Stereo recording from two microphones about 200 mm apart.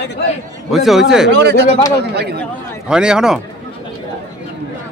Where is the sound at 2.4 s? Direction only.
5° right (ahead or behind).